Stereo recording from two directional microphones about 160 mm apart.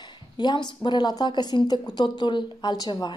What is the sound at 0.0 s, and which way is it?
A woman's voice, 25° left (ahead or behind).